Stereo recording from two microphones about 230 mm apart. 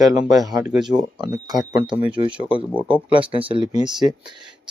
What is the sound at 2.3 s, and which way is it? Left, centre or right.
Speech, centre.